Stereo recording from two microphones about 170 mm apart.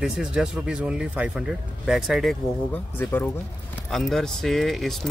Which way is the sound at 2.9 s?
10° left (ahead or behind).